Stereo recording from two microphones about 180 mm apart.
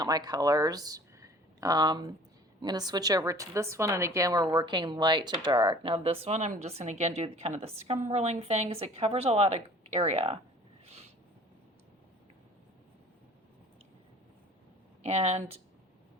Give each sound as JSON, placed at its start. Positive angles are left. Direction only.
{"t": 0.0, "sound": "a woman's voice", "side_deg": -20}
{"t": 15.0, "sound": "a woman's voice", "side_deg": -35}